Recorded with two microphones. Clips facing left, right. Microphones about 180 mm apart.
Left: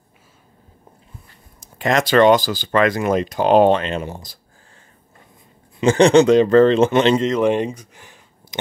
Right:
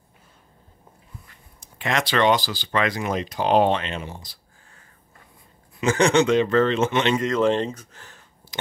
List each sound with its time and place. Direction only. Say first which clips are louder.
1.6 s speech: left 6 dB; 40° left (ahead or behind)
5.8 s a man's voice: left 7 dB; 30° left (ahead or behind)
7.2 s speech: left 3 dB; 20° left (ahead or behind)